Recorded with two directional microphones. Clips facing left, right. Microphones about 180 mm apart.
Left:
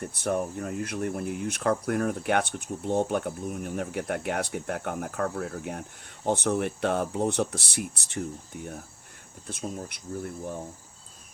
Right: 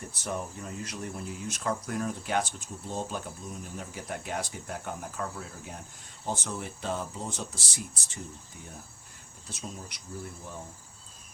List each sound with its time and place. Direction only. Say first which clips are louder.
0.2 s speech: left 7 dB; 55° left (ahead or behind)
9.5 s speech: left 7 dB; 55° left (ahead or behind)